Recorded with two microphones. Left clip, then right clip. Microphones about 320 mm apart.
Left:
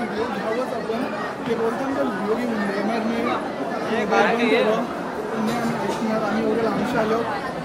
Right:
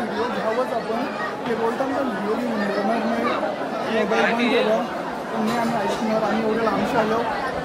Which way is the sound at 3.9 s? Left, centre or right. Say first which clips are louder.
Left 1 dB; centre.